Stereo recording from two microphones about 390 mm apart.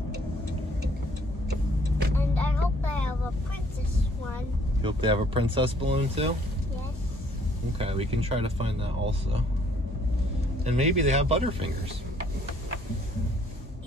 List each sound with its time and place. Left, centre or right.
2.1 s a sound: centre
4.8 s speech: centre
7.8 s speech: centre
10.6 s speech: centre